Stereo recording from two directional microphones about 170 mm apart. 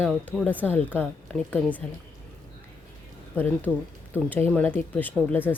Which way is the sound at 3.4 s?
10° left (ahead or behind).